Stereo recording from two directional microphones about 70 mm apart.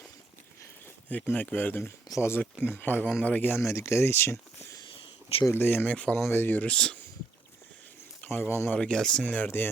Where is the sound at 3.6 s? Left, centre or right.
Left.